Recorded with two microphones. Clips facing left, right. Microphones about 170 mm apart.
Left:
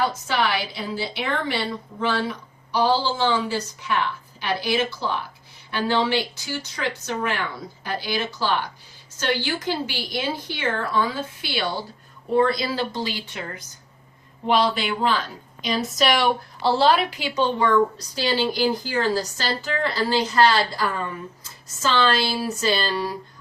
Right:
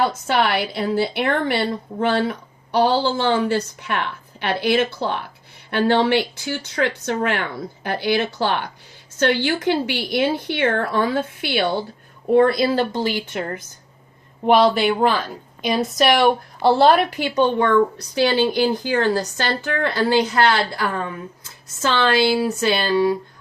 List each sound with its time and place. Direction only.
0.3 s a woman's voice: 60° right (ahead or behind)